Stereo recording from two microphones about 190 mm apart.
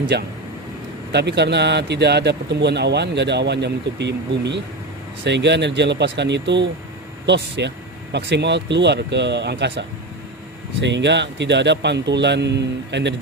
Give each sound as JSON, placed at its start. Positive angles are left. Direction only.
{"t": 0.1, "sound": "a man's voice", "side_deg": -60}